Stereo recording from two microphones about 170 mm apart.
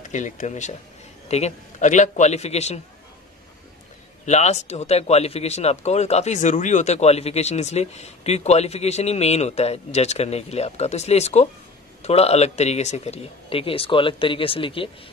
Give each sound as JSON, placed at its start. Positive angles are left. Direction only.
{"t": 0.1, "sound": "speech", "side_deg": 45}
{"t": 4.3, "sound": "speech", "side_deg": 40}